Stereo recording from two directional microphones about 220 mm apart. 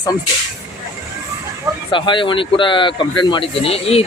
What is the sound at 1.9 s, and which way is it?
A man's voice, 20° left (ahead or behind).